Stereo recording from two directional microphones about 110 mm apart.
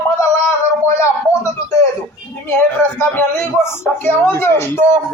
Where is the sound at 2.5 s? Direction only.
20° left (ahead or behind).